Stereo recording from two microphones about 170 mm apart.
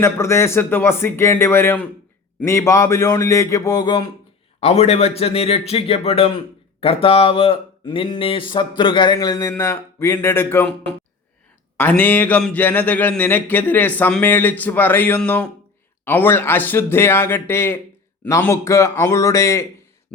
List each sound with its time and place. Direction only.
0.0 s speech: 15° left (ahead or behind)
4.6 s a man's voice: 40° left (ahead or behind); by 19.6 s 15° left (ahead or behind)